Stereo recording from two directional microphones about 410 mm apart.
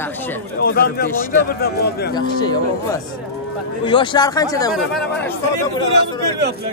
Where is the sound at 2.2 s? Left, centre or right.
Centre.